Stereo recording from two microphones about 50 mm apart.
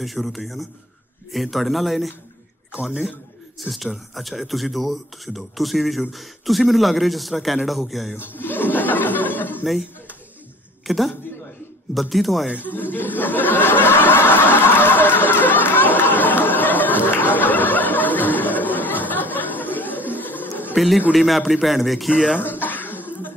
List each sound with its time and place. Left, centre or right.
0.0 s speech: centre
3.5 s speech: centre
8.2 s snicker: left
10.9 s speech: centre
12.4 s speech: right
12.7 s a sound: left
14.8 s chatter: left
16.0 s a sound: left
20.7 s a man's voice: centre
22.1 s speech: centre
22.4 s throat clearing: left